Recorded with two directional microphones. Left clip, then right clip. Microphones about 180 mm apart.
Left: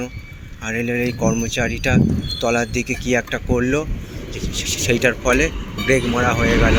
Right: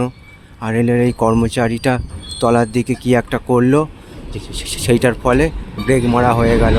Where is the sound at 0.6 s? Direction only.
35° right (ahead or behind).